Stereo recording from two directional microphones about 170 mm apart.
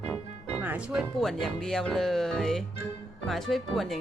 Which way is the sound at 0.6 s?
10° right (ahead or behind).